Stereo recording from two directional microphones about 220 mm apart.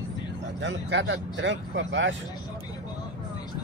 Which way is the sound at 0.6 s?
55° right (ahead or behind).